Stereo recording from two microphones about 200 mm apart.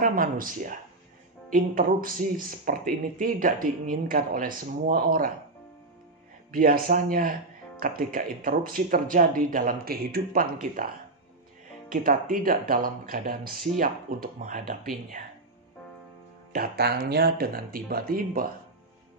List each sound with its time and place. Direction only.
0.0 s speech: 45° right (ahead or behind)
6.5 s speech: 45° right (ahead or behind)
11.9 s speech: 45° right (ahead or behind)
16.5 s speech: 50° right (ahead or behind)